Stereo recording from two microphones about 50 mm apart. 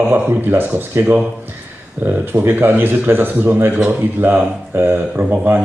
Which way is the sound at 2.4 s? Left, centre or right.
Right.